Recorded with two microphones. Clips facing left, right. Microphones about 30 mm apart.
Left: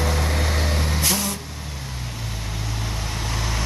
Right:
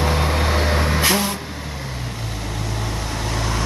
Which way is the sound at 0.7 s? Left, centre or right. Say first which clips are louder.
Right 5 dB; right.